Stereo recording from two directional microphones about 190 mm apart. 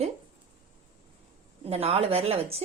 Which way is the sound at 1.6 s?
35° right (ahead or behind).